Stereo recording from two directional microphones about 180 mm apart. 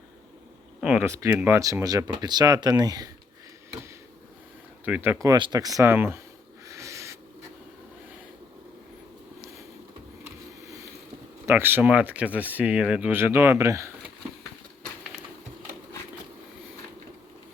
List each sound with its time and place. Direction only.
0.8 s speech: 5° right (ahead or behind)
4.9 s speech: 10° right (ahead or behind)
6.7 s owl: 15° right (ahead or behind)
11.4 s speech: 10° right (ahead or behind)